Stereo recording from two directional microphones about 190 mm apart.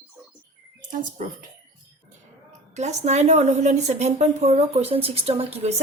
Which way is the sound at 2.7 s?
35° right (ahead or behind).